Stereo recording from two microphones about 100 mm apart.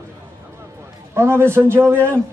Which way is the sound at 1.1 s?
25° right (ahead or behind).